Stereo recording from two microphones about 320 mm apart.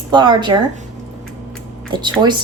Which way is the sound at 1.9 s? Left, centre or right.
Centre.